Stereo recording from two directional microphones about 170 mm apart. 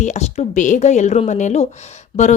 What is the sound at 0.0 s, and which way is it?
Speech, 40° left (ahead or behind).